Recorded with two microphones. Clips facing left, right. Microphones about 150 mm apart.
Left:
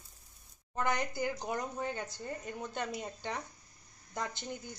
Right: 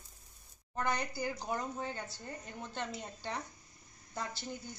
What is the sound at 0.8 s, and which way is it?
A woman's voice, 20° left (ahead or behind).